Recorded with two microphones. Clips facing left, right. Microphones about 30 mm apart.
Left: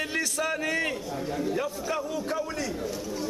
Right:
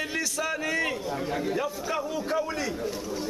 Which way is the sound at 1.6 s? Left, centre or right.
Centre.